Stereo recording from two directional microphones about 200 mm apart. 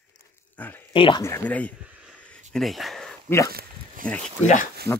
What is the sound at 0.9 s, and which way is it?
Speech, 25° left (ahead or behind).